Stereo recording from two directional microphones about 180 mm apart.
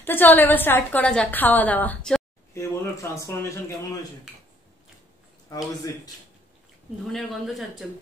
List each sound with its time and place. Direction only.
0.0 s a woman's voice: 10° left (ahead or behind)
7.1 s speech: centre (ahead or behind)